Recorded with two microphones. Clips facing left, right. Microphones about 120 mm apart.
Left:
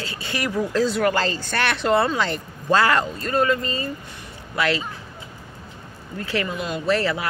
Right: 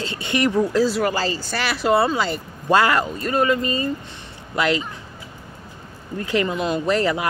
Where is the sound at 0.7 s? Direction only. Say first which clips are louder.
Right 1 dB; 5° right (ahead or behind).